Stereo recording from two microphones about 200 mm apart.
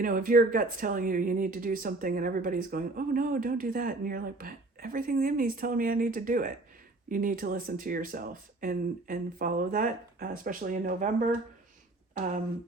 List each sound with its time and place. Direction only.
0.0 s speech: 45° right (ahead or behind)